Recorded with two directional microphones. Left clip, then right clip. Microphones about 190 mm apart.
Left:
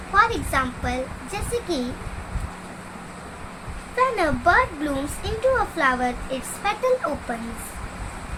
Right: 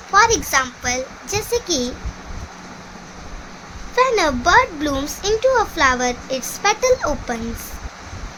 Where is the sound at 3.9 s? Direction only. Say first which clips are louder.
Right 5 dB; 50° right (ahead or behind).